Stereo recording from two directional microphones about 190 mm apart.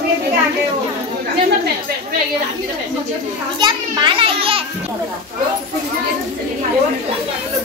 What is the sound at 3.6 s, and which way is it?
Children playing, 25° right (ahead or behind).